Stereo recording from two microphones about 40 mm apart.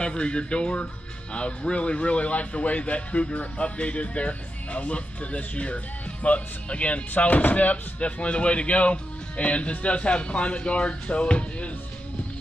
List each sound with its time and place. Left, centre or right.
0.0 s speech: left